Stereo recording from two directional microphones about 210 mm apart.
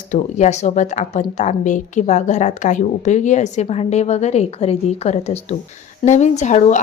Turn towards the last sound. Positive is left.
turn(degrees=35)  # may be behind; listen again after turning